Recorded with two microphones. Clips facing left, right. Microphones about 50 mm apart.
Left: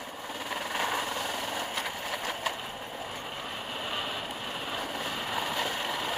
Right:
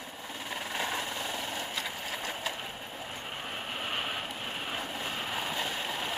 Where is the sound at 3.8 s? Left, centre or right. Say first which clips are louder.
Even; right.